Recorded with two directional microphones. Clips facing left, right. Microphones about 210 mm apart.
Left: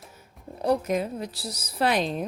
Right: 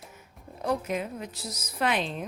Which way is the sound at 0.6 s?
35° left (ahead or behind).